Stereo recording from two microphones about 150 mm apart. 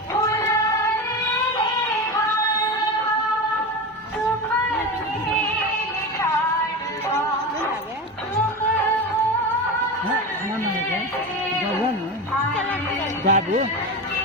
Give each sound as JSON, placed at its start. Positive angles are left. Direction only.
{"t": 13.2, "sound": "music", "side_deg": -55}